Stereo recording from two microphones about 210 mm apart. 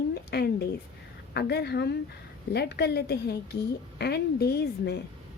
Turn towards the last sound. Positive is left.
turn(degrees=50)  # may be behind; listen again after turning